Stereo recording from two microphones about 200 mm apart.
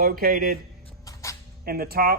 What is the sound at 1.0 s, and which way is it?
Sneeze, 15° left (ahead or behind).